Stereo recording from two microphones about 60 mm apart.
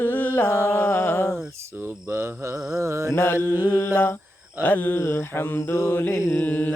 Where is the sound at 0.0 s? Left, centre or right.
Left.